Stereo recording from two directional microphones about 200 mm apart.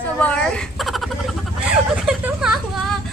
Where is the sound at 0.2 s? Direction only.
5° left (ahead or behind).